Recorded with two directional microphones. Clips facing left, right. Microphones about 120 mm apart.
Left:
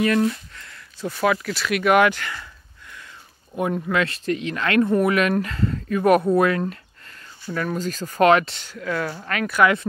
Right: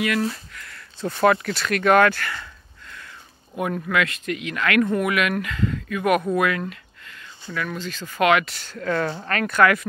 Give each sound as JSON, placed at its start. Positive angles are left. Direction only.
{"t": 0.6, "sound": "a sound", "side_deg": 20}
{"t": 1.2, "sound": "speech", "side_deg": 5}
{"t": 3.5, "sound": "speech", "side_deg": 20}
{"t": 4.0, "sound": "speech", "side_deg": 35}
{"t": 8.5, "sound": "speech", "side_deg": 10}